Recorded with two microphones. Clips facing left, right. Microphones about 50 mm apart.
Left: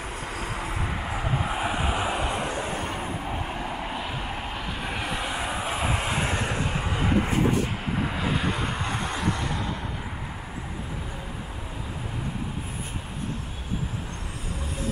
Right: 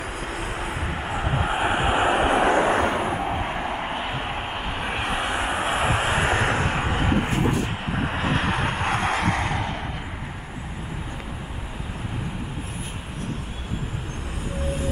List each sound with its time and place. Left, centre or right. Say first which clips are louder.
0.0 s vehicle: right 3 dB; right
3.0 s vehicle: right 6 dB; right
6.4 s vehicle: right 5 dB; right
8.3 s vehicle: right 3 dB; right